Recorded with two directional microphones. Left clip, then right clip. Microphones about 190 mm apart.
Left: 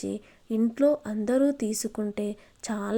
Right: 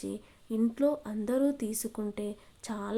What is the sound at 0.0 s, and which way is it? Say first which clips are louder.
Speech: left 5 dB; 20° left (ahead or behind).